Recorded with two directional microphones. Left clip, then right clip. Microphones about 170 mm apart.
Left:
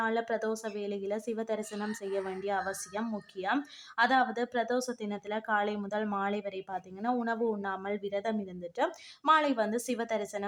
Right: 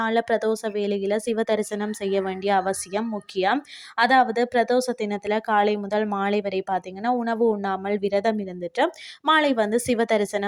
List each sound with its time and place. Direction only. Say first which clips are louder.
0.0 s a woman's voice: right 9 dB; 40° right (ahead or behind)